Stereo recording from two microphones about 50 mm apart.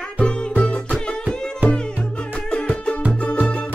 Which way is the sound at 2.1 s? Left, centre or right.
Left.